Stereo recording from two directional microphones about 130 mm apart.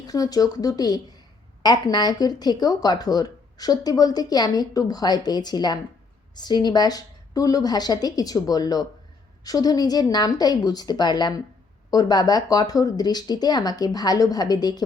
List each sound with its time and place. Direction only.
0.1 s speech: 30° left (ahead or behind)